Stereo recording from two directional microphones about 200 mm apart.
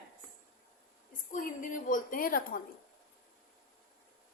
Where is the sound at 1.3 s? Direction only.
45° left (ahead or behind).